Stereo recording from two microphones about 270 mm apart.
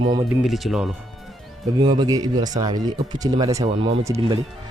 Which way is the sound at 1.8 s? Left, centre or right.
Centre.